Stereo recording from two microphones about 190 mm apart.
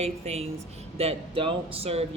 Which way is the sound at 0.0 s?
35° right (ahead or behind).